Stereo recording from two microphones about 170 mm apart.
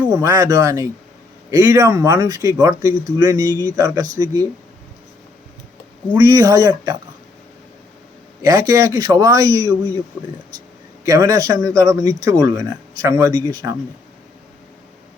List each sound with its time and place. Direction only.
0.1 s speech: 20° right (ahead or behind)
6.1 s speech: 20° right (ahead or behind)
8.4 s speech: 20° right (ahead or behind)
11.0 s speech: 20° right (ahead or behind)